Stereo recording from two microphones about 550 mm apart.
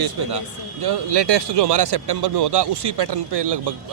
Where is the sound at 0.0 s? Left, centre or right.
Right.